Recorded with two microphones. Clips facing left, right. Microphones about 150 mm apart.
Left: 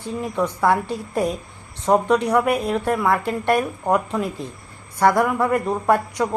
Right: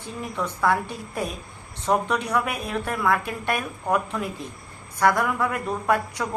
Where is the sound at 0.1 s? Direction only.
20° left (ahead or behind).